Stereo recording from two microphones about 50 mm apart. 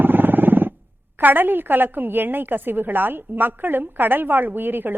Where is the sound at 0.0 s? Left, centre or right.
Right.